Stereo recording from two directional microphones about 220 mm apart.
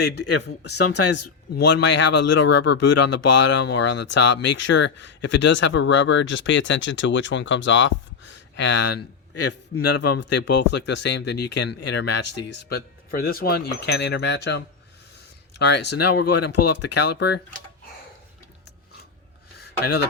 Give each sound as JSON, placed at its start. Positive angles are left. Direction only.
{"t": 0.0, "sound": "speech", "side_deg": 50}
{"t": 0.8, "sound": "speech", "side_deg": 90}
{"t": 1.6, "sound": "speech", "side_deg": 50}
{"t": 10.2, "sound": "speech", "side_deg": 55}
{"t": 16.4, "sound": "speech", "side_deg": 90}
{"t": 17.2, "sound": "speech", "side_deg": 50}
{"t": 19.5, "sound": "a sound", "side_deg": 45}